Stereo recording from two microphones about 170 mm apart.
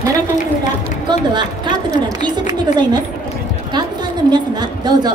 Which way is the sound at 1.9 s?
25° right (ahead or behind).